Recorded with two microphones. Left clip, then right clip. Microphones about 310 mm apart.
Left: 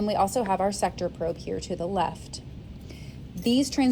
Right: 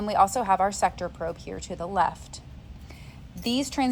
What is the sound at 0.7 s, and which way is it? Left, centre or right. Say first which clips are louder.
A woman's voice: right 1 dB; centre.